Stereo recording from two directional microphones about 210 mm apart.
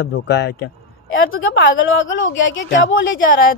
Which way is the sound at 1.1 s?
70° left (ahead or behind).